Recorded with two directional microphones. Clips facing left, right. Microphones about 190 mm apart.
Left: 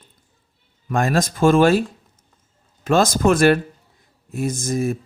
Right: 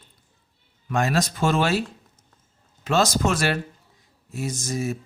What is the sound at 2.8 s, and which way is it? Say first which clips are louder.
Speech: left 5 dB; 50° left (ahead or behind).